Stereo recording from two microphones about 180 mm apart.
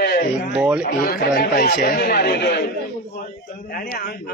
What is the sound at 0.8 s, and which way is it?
Speech, 55° left (ahead or behind).